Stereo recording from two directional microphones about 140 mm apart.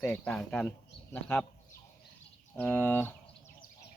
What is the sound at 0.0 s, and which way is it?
Speech, 10° left (ahead or behind).